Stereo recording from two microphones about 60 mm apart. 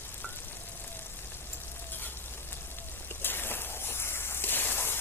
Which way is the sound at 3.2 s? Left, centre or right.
Left.